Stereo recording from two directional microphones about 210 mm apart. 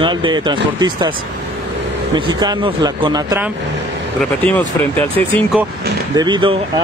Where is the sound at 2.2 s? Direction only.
20° right (ahead or behind).